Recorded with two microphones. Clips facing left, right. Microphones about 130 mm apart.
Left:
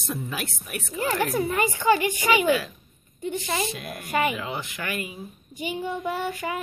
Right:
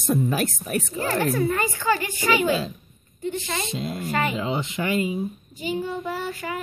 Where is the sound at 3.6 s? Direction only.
25° right (ahead or behind).